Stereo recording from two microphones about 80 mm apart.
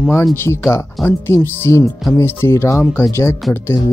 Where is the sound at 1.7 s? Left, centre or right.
Left.